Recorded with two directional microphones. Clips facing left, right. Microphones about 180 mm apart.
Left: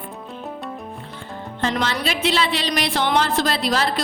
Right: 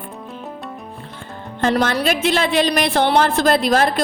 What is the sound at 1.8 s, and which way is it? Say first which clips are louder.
Speech: right 4 dB; 50° right (ahead or behind).